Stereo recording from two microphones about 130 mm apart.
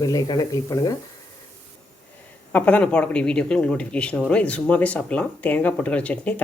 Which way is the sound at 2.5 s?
10° left (ahead or behind).